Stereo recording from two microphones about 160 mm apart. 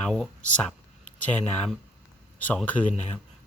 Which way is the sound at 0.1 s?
5° left (ahead or behind).